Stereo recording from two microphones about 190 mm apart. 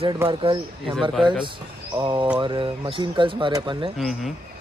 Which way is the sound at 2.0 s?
25° right (ahead or behind).